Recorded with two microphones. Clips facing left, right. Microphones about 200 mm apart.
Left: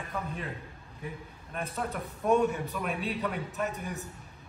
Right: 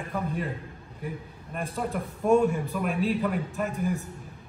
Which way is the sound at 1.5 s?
Centre (ahead or behind).